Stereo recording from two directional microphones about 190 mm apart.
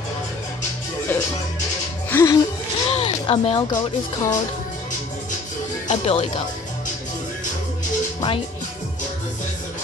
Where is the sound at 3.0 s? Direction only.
30° left (ahead or behind).